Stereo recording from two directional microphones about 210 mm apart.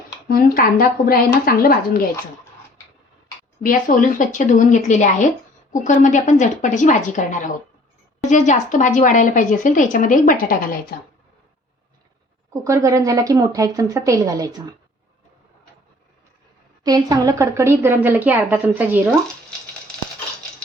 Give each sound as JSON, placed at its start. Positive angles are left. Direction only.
{"t": 0.3, "sound": "a woman's voice", "side_deg": 45}
{"t": 3.6, "sound": "a woman's voice", "side_deg": 40}
{"t": 12.6, "sound": "a woman's voice", "side_deg": -15}
{"t": 16.8, "sound": "a woman's voice", "side_deg": -15}